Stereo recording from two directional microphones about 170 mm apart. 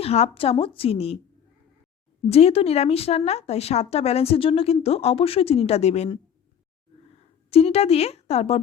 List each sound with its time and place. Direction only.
0.0 s speech: 35° left (ahead or behind)
2.3 s speech: 35° left (ahead or behind)
7.5 s speech: 35° left (ahead or behind)